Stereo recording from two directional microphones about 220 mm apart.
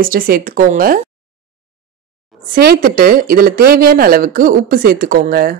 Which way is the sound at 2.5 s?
40° right (ahead or behind).